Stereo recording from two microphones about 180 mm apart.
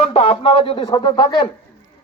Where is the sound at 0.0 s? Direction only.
30° left (ahead or behind).